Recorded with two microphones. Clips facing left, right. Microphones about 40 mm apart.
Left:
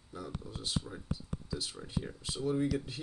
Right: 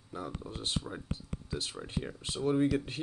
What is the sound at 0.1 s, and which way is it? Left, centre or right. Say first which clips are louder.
Speech: right 3 dB; right.